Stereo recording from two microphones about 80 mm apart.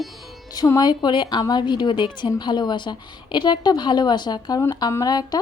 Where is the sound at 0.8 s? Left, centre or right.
Left.